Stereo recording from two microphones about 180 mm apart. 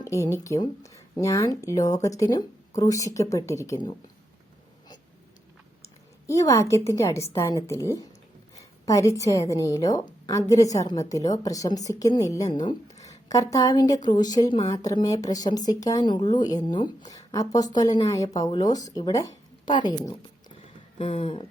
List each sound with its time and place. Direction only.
0.0 s speech: 15° left (ahead or behind)
5.8 s a woman's voice: 15° left (ahead or behind)
8.9 s speech: 20° left (ahead or behind)
21.0 s speech: 30° left (ahead or behind)